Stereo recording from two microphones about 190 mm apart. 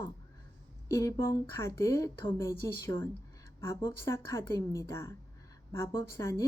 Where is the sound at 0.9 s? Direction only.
15° left (ahead or behind).